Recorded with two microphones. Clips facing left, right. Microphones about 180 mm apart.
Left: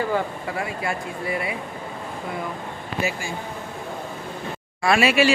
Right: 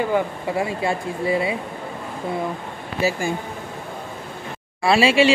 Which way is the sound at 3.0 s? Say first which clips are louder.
Right 6 dB; 35° right (ahead or behind).